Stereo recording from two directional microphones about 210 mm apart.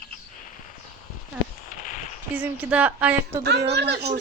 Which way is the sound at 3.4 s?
55° right (ahead or behind).